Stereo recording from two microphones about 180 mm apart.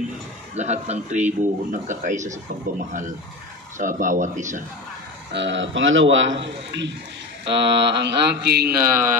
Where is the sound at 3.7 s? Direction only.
45° right (ahead or behind).